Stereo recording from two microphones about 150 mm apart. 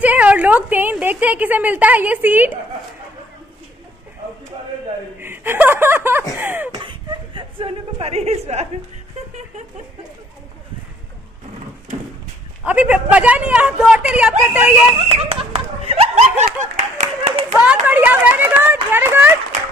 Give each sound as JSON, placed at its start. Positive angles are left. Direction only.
{"t": 0.0, "sound": "a woman's voice", "side_deg": -10}
{"t": 5.2, "sound": "a woman's voice", "side_deg": -15}
{"t": 6.8, "sound": "a sound", "side_deg": -35}
{"t": 12.6, "sound": "a woman's voice", "side_deg": -10}
{"t": 15.0, "sound": "snicker", "side_deg": -40}
{"t": 16.7, "sound": "clapping", "side_deg": -50}
{"t": 17.6, "sound": "a woman's voice", "side_deg": -10}